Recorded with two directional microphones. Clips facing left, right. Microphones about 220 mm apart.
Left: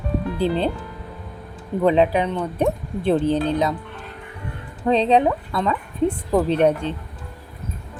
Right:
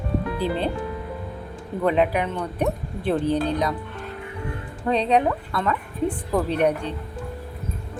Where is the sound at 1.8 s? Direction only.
25° left (ahead or behind).